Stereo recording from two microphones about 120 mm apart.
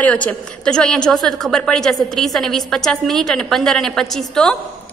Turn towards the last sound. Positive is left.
turn(degrees=5)  # may be behind; listen again after turning